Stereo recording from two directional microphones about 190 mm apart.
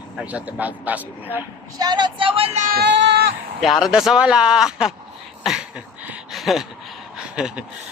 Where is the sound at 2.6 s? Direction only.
55° right (ahead or behind).